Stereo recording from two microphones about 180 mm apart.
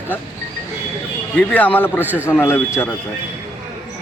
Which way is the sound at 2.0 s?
10° right (ahead or behind).